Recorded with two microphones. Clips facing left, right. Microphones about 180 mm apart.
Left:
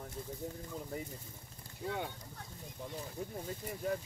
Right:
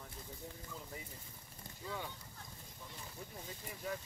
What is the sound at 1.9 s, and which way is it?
Speech, 60° left (ahead or behind).